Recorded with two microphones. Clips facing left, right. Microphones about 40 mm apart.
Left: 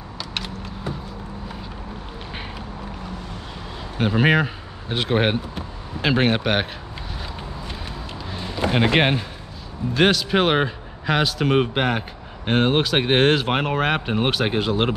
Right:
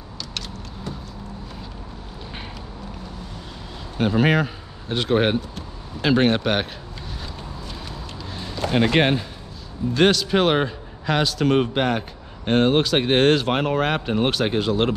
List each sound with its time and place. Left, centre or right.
0.3 s vehicle: left
4.0 s speech: centre
8.3 s a sound: centre
9.9 s speech: centre